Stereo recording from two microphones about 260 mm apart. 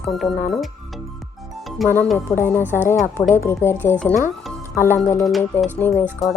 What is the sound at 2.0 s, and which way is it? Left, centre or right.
Speech, centre.